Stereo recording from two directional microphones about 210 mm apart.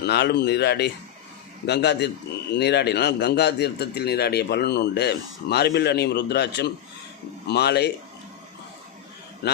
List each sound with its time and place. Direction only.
0.0 s a man's voice: 50° left (ahead or behind)